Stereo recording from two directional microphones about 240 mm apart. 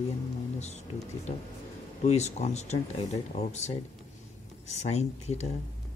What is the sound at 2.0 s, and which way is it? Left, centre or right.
Speech, left.